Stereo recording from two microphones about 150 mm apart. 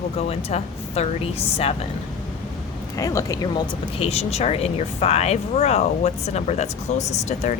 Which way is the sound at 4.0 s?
45° left (ahead or behind).